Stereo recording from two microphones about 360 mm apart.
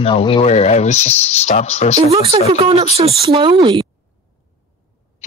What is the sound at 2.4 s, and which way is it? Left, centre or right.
Speech, centre.